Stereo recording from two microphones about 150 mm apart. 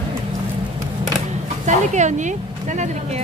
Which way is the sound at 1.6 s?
55° right (ahead or behind).